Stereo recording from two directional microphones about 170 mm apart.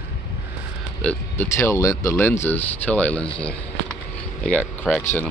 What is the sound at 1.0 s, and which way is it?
Speech, 10° left (ahead or behind).